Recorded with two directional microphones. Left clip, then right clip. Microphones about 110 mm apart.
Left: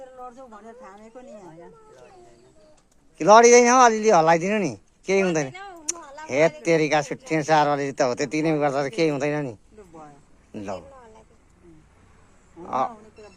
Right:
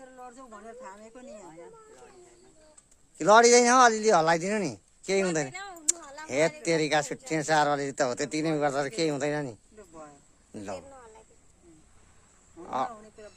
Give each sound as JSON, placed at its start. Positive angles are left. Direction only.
{"t": 0.3, "sound": "speech", "side_deg": -40}
{"t": 3.2, "sound": "a man's voice", "side_deg": -20}
{"t": 5.5, "sound": "speech", "side_deg": -45}
{"t": 6.0, "sound": "a sound", "side_deg": -45}
{"t": 6.2, "sound": "a man's voice", "side_deg": -20}
{"t": 10.5, "sound": "a sound", "side_deg": -20}
{"t": 12.6, "sound": "speech", "side_deg": -20}